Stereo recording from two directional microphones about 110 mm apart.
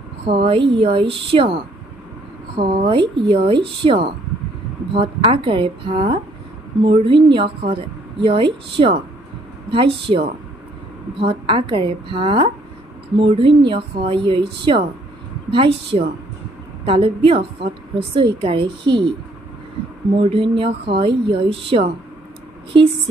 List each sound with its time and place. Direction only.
0.2 s a woman's voice: 55° right (ahead or behind)
20.2 s a woman's voice: 55° right (ahead or behind)